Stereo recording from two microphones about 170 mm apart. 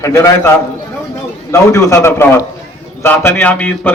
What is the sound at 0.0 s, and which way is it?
Speech, 15° left (ahead or behind).